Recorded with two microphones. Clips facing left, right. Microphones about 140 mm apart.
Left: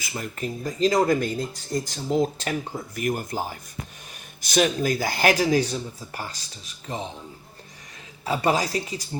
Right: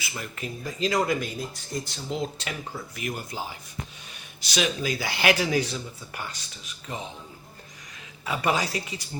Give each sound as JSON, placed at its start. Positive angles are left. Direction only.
{"t": 0.2, "sound": "speech", "side_deg": 40}
{"t": 8.2, "sound": "speech", "side_deg": 35}